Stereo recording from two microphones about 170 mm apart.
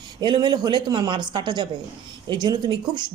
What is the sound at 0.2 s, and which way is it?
Speech, 25° right (ahead or behind).